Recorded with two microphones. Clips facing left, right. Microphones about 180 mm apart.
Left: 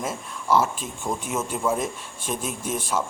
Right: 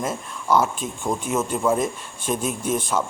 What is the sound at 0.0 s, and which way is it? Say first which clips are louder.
A man's voice: right 3 dB; 5° left (ahead or behind).